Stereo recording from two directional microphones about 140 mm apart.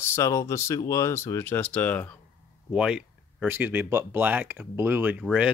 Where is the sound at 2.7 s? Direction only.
5° right (ahead or behind).